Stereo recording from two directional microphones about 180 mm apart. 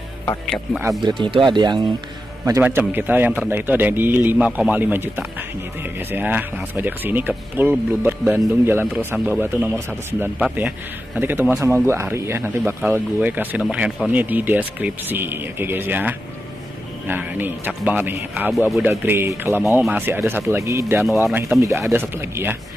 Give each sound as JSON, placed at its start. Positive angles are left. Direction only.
{"t": 0.2, "sound": "speech", "side_deg": 10}
{"t": 1.2, "sound": "speech", "side_deg": -25}
{"t": 2.4, "sound": "speech", "side_deg": -15}